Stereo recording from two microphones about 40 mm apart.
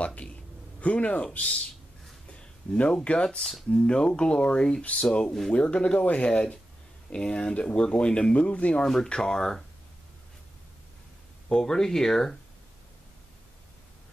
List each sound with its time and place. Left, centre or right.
0.0 s speech: left
8.8 s speech: centre
11.4 s speech: centre